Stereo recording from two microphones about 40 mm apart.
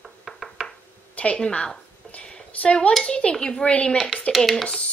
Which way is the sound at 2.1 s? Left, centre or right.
Left.